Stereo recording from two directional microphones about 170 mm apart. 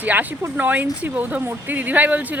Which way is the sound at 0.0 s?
10° right (ahead or behind).